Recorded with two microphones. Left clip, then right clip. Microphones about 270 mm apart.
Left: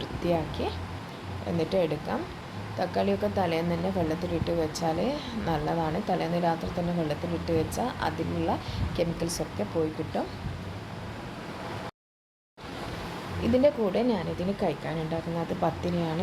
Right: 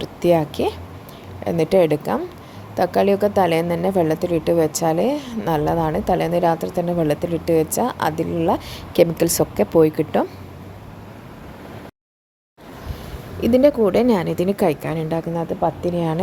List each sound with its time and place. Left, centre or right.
0.0 s speech: right
13.4 s speech: right